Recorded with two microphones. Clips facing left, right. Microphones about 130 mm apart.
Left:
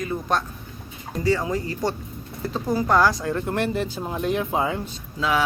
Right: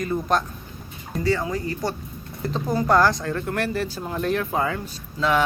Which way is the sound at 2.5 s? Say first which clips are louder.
Right 1 dB; centre (ahead or behind).